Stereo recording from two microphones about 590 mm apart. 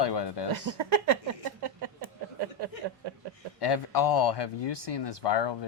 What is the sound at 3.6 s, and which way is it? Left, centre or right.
Speech, left.